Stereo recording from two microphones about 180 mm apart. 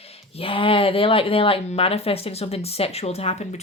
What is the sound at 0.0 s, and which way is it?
Speech, 35° left (ahead or behind).